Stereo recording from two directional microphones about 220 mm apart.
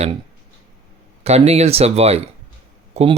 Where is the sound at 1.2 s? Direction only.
30° right (ahead or behind).